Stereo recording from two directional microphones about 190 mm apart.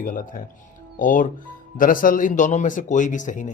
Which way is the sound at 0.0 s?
45° left (ahead or behind).